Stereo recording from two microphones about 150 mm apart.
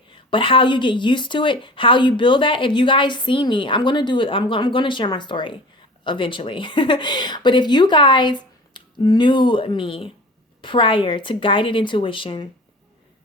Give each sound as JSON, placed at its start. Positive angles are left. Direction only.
{"t": 0.3, "sound": "a woman's voice", "side_deg": 35}